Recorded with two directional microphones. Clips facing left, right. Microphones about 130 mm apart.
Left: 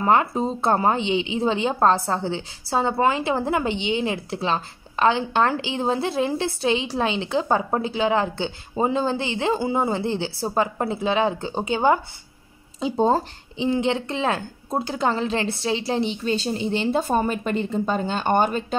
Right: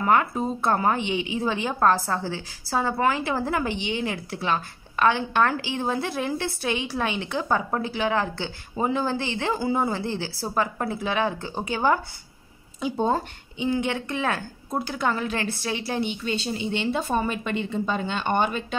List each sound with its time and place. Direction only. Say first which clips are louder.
0.0 s a woman's voice: left 2 dB; 30° left (ahead or behind)
12.8 s a woman's voice: left 4 dB; 30° left (ahead or behind)